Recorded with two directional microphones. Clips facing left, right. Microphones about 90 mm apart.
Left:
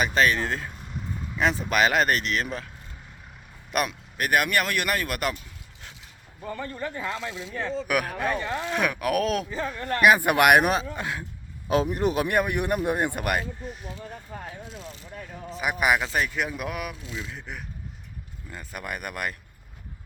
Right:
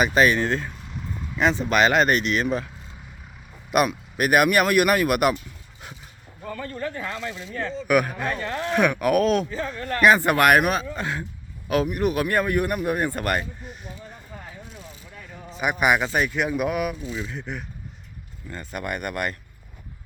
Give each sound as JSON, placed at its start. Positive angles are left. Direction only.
{"t": 0.0, "sound": "speech", "side_deg": -5}
{"t": 3.7, "sound": "speech", "side_deg": -5}
{"t": 6.5, "sound": "speech", "side_deg": 20}
{"t": 10.6, "sound": "speech", "side_deg": 25}
{"t": 10.9, "sound": "speech", "side_deg": 5}
{"t": 11.7, "sound": "speech", "side_deg": 25}
{"t": 15.4, "sound": "speech", "side_deg": 0}